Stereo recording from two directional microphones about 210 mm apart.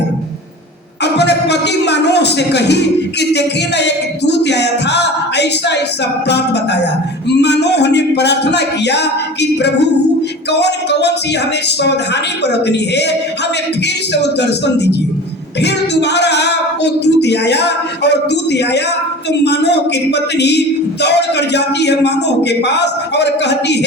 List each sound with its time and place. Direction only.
1.0 s a man's voice: 55° left (ahead or behind)